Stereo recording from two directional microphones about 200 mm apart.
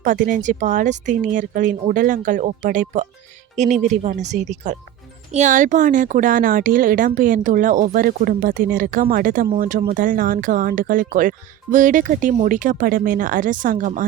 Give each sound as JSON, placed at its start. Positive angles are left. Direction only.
{"t": 0.0, "sound": "a woman's voice", "side_deg": -40}